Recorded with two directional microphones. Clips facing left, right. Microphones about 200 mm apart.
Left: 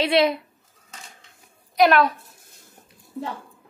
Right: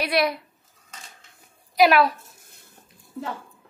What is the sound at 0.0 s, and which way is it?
Speech, 25° left (ahead or behind).